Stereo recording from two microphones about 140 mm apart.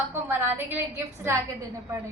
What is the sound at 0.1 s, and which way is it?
A woman's voice, 15° right (ahead or behind).